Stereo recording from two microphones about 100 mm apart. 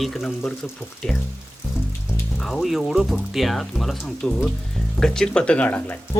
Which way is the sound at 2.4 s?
Centre (ahead or behind).